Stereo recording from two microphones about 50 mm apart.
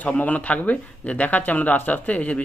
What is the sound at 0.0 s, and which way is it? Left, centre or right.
Speech, left.